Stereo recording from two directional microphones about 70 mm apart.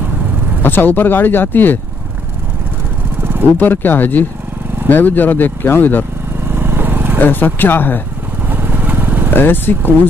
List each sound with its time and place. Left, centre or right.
0.6 s speech: left
3.5 s speech: left
6.4 s vehicle: right
7.2 s speech: left
8.5 s vehicle: right
9.3 s speech: left